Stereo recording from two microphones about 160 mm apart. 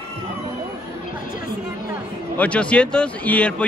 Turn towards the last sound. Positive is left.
turn(degrees=10)  # may be behind; listen again after turning